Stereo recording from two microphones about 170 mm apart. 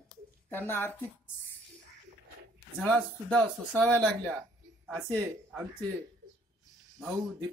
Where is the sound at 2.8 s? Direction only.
5° left (ahead or behind).